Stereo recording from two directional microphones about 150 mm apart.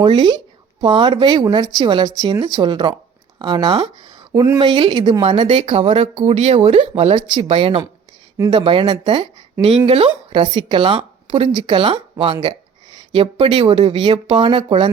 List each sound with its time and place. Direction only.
0.0 s speech: 30° right (ahead or behind)